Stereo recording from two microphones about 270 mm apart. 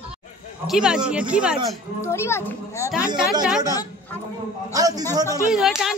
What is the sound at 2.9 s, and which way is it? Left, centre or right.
Speech, centre.